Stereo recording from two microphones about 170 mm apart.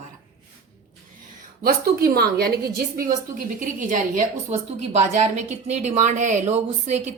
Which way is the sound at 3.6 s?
50° right (ahead or behind).